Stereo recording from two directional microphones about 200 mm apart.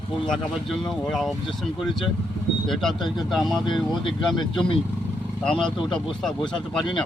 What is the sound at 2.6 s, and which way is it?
Speech, centre (ahead or behind).